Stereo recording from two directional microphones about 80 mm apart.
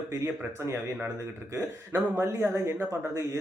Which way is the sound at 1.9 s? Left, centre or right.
Right.